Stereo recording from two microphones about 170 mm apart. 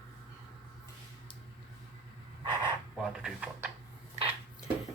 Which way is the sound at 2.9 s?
5° right (ahead or behind).